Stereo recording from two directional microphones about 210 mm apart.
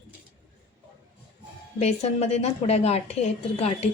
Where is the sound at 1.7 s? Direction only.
30° left (ahead or behind).